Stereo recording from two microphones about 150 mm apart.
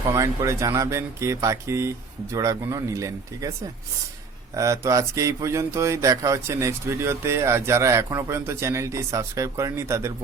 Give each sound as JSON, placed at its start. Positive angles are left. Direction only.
{"t": 0.1, "sound": "speech", "side_deg": -20}
{"t": 4.5, "sound": "speech", "side_deg": -20}